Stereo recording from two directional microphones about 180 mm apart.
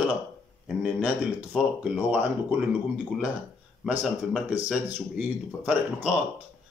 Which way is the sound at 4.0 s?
5° right (ahead or behind).